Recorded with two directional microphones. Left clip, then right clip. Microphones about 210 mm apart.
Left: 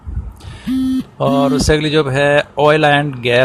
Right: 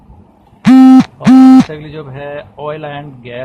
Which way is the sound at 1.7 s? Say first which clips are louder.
Left 13 dB; 55° left (ahead or behind).